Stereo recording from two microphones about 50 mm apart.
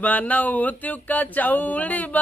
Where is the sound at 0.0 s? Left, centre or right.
Left.